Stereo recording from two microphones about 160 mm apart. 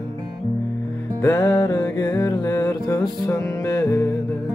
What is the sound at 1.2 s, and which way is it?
Music, 15° left (ahead or behind).